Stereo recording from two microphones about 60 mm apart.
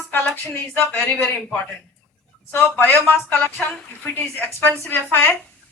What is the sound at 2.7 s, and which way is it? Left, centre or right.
A woman's voice, left.